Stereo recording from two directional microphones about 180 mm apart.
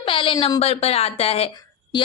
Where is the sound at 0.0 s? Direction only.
30° left (ahead or behind).